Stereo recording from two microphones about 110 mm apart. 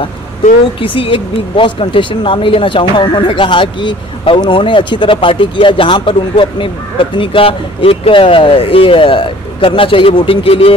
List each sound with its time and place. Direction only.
0.7 s speech: 50° left (ahead or behind)